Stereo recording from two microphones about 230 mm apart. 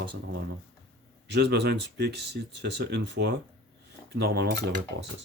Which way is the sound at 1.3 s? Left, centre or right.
Right.